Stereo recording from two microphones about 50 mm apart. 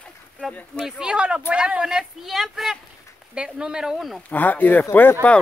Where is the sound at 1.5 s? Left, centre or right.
Right; by 2.8 s centre.